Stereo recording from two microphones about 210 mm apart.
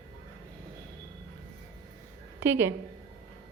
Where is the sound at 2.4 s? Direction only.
10° right (ahead or behind).